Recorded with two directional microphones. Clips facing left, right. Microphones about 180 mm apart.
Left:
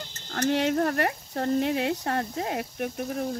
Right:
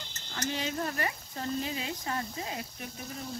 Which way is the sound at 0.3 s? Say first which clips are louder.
Left 10 dB; 60° left (ahead or behind).